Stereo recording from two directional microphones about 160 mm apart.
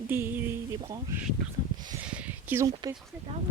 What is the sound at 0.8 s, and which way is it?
Speech, 25° right (ahead or behind).